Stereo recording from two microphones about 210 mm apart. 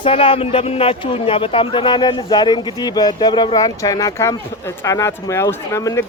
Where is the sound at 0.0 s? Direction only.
25° left (ahead or behind).